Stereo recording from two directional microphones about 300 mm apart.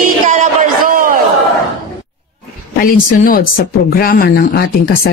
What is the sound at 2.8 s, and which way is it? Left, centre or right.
Speech, left.